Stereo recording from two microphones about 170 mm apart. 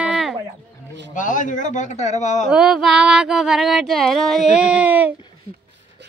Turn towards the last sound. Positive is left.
turn(degrees=-10)  # may be behind; listen again after turning